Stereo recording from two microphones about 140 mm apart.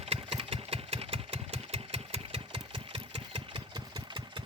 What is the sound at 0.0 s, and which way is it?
Engine, 45° right (ahead or behind).